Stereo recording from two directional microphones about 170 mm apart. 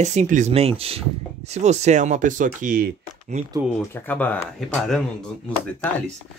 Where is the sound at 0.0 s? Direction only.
45° right (ahead or behind).